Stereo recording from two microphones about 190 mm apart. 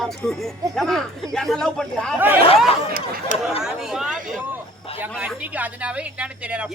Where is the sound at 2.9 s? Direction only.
50° right (ahead or behind).